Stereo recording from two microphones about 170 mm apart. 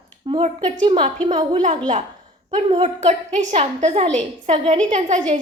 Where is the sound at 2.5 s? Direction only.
40° right (ahead or behind).